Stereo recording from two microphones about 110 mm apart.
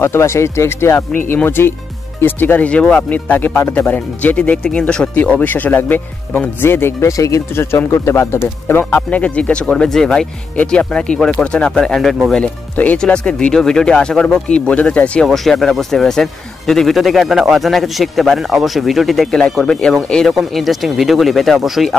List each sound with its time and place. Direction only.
0.0 s speech: 25° left (ahead or behind); by 21.9 s centre (ahead or behind)